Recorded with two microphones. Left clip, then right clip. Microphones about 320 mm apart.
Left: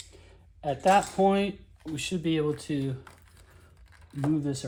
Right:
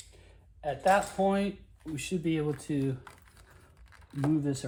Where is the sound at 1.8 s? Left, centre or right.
Centre.